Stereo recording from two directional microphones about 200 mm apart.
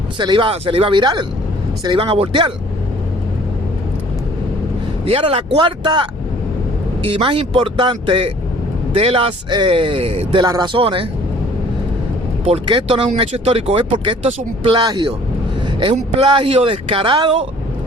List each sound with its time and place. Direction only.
0.2 s speech: 25° right (ahead or behind)
5.0 s speech: 30° right (ahead or behind)
12.5 s speech: 25° right (ahead or behind)